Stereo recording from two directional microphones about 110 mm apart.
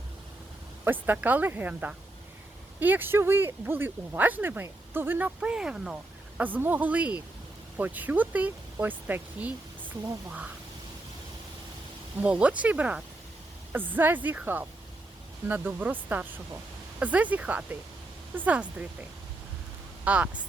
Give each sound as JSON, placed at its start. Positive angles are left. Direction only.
{"t": 0.9, "sound": "speech", "side_deg": -15}
{"t": 12.2, "sound": "speech", "side_deg": -10}
{"t": 20.1, "sound": "speech", "side_deg": -15}